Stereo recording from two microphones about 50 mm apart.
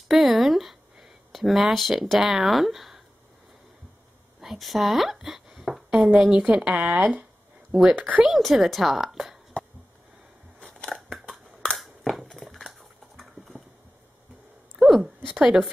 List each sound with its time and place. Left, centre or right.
0.1 s speech: centre
4.4 s a sound: centre
5.9 s speech: right
8.0 s speech: right
8.3 s a woman's voice: centre
10.6 s scissors: centre
11.0 s crushing: centre
11.7 s a sound: centre
14.8 s a sound: centre
15.3 s a woman's voice: centre